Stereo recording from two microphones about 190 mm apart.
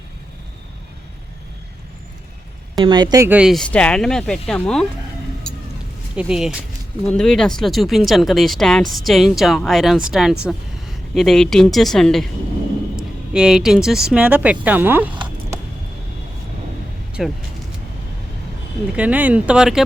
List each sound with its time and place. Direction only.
2.7 s speech: 25° right (ahead or behind)
3.2 s speech: 5° right (ahead or behind)
5.5 s a sound: 5° left (ahead or behind)
6.1 s speech: 5° right (ahead or behind)
17.2 s speech: centre (ahead or behind)
18.9 s speech: 10° right (ahead or behind)